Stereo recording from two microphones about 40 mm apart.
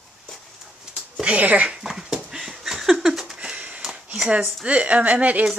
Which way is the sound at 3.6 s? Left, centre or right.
Right.